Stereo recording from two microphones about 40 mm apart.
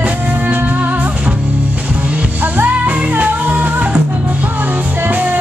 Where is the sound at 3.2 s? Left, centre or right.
Right.